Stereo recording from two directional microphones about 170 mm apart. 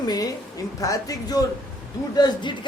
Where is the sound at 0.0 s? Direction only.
25° left (ahead or behind).